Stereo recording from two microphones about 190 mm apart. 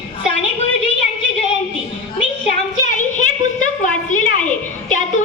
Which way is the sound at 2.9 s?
40° left (ahead or behind).